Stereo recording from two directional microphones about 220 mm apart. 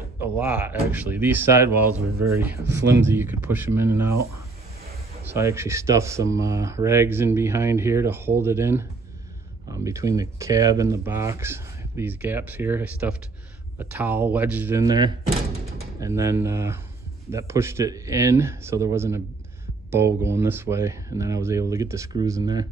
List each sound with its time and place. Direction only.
0.2 s speech: 5° right (ahead or behind)
3.1 s speech: 10° right (ahead or behind)
5.2 s speech: 10° right (ahead or behind)